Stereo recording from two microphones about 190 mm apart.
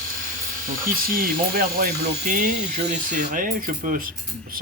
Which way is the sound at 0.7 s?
50° right (ahead or behind).